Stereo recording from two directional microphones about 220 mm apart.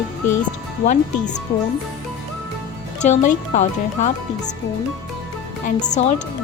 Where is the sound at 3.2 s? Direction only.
35° left (ahead or behind).